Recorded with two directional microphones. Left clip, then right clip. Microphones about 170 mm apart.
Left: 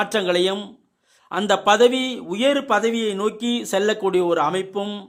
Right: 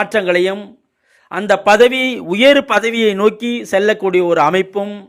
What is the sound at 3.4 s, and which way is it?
A man's voice, 5° right (ahead or behind).